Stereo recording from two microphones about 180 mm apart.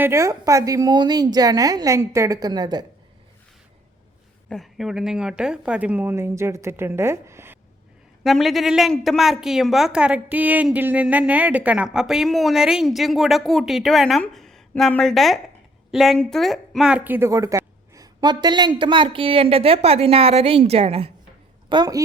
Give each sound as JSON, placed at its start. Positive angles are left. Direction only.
{"t": 0.0, "sound": "a woman's voice", "side_deg": -15}
{"t": 4.4, "sound": "a woman's voice", "side_deg": 0}
{"t": 8.2, "sound": "a woman's voice", "side_deg": 0}
{"t": 21.7, "sound": "a woman's voice", "side_deg": -20}